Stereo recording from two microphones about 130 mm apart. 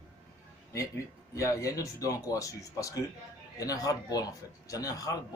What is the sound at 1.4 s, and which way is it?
Speech, 25° left (ahead or behind).